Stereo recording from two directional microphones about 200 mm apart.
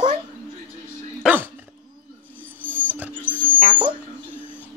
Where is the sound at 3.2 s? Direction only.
10° left (ahead or behind).